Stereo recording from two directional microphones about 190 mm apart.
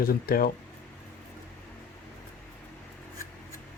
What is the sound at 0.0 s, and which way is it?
Speech, 50° left (ahead or behind).